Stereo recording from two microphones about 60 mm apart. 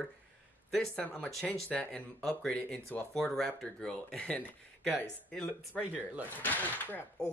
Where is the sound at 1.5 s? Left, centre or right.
Centre.